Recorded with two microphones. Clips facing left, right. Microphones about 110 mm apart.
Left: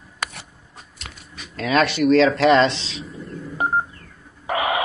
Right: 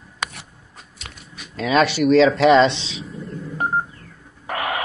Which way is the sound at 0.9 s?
Centre (ahead or behind).